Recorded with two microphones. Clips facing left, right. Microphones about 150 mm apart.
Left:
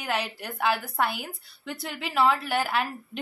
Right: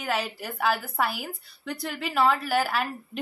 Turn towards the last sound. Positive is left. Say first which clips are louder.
# even
turn(degrees=0)  # may be behind; listen again after turning